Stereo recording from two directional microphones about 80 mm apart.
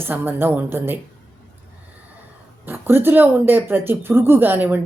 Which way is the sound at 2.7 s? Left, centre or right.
Right.